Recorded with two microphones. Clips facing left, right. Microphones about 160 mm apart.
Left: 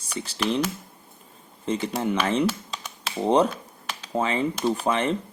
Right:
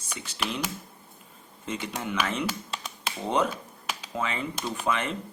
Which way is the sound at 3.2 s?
35° left (ahead or behind).